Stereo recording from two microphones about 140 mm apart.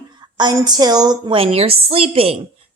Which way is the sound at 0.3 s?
30° right (ahead or behind).